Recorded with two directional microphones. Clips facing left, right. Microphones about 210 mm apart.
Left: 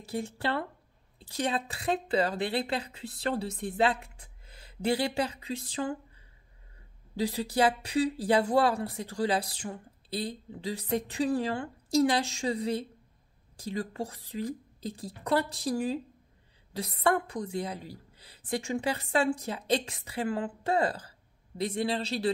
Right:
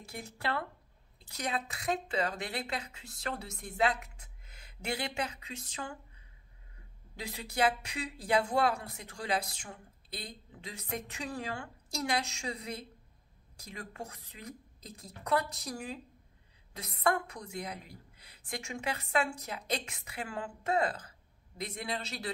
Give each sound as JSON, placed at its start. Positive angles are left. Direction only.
{"t": 0.0, "sound": "speech", "side_deg": 30}
{"t": 7.2, "sound": "speech", "side_deg": 30}